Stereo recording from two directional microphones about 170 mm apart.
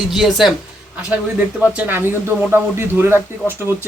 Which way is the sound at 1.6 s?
10° right (ahead or behind).